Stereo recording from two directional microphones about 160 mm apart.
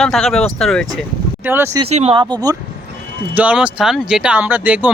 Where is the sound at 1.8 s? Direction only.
40° right (ahead or behind).